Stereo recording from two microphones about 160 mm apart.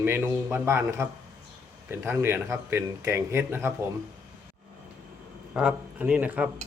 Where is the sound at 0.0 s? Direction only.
15° right (ahead or behind).